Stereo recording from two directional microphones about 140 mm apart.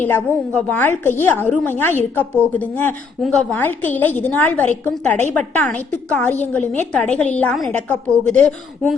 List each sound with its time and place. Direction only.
0.0 s a woman's voice: 15° left (ahead or behind)